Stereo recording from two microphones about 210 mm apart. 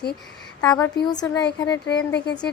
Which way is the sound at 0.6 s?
15° left (ahead or behind).